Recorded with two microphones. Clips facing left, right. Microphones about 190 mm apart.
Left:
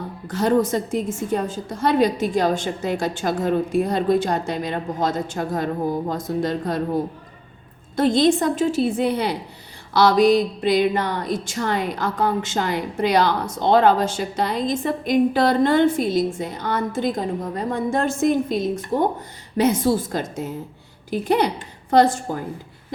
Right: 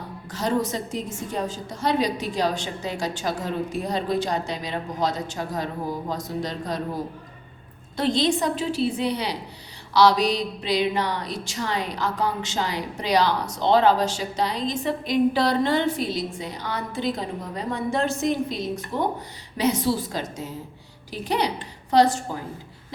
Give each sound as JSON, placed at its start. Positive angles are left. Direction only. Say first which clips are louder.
{"t": 0.3, "sound": "speech", "louder": "left 6 dB", "side_deg": 55}
{"t": 7.9, "sound": "speech", "louder": "left 5 dB", "side_deg": 50}